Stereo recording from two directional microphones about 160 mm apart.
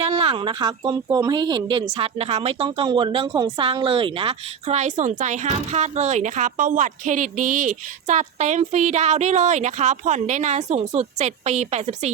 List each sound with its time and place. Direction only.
0.0 s a woman's voice: 40° right (ahead or behind)